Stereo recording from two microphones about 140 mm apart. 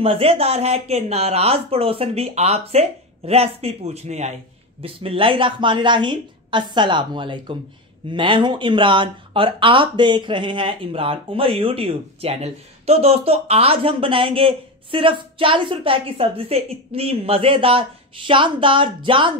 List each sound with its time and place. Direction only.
0.0 s speech: 45° right (ahead or behind)
4.8 s speech: 40° right (ahead or behind)